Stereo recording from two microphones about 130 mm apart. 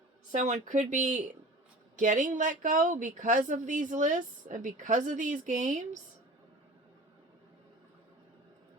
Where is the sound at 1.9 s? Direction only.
80° right.